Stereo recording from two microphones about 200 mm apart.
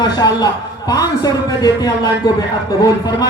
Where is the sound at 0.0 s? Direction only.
20° left (ahead or behind).